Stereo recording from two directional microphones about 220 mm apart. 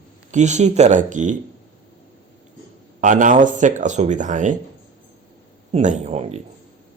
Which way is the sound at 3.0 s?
35° right (ahead or behind).